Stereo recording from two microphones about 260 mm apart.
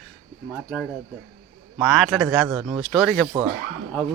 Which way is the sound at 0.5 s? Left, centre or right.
Centre.